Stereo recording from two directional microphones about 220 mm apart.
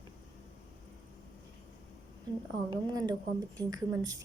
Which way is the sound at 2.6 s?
20° right (ahead or behind).